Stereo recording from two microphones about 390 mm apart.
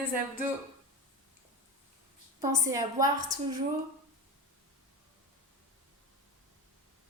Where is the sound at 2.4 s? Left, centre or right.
Centre.